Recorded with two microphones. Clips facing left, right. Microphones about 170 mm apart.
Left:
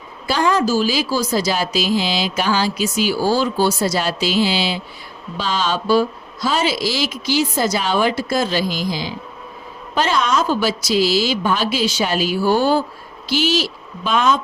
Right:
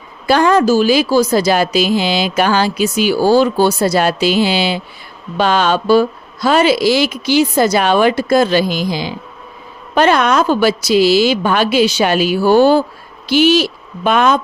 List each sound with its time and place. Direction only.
0.3 s a woman's voice: 60° right (ahead or behind)
13.2 s a woman's voice: 60° right (ahead or behind)